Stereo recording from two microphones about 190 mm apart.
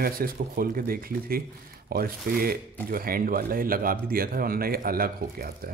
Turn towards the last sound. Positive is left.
turn(degrees=-50)  # may be behind; listen again after turning